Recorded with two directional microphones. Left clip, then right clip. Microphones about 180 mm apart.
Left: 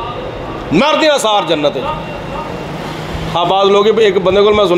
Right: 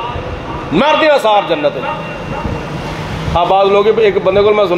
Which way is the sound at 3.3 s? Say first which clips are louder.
Right 1 dB; 50° left (ahead or behind).